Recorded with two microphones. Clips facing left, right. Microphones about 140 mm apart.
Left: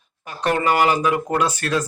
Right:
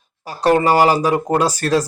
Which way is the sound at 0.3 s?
35° right (ahead or behind).